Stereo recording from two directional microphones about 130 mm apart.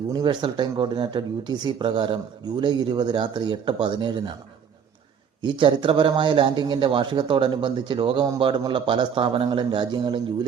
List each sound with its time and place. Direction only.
0.1 s speech: 35° right (ahead or behind)
5.4 s speech: 40° right (ahead or behind)